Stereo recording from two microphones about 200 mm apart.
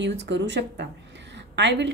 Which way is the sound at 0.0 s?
60° right (ahead or behind).